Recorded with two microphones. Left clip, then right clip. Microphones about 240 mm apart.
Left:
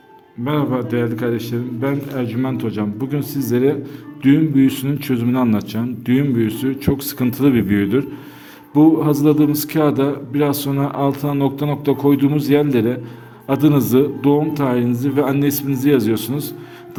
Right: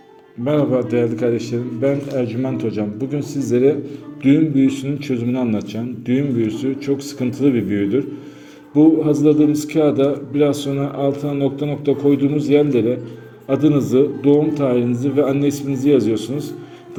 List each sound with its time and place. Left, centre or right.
0.4 s a man's voice: centre